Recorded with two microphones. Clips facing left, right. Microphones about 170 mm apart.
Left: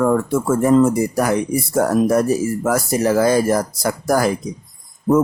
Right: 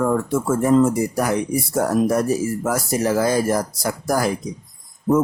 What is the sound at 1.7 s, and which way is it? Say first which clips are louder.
Speech: left 3 dB; 65° left (ahead or behind).